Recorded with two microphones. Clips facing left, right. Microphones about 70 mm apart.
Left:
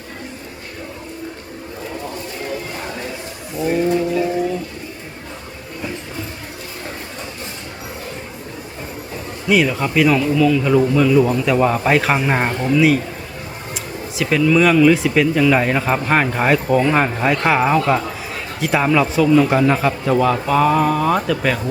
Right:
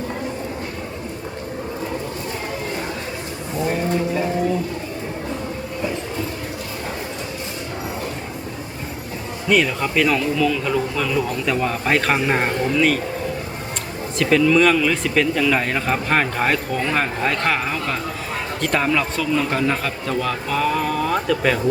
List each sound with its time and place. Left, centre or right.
3.6 s vehicle: centre
9.5 s speech: centre
14.2 s speech: centre